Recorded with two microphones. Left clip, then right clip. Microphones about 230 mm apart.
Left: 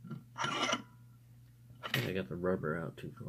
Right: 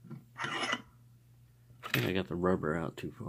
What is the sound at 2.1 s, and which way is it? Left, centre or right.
Speech, right.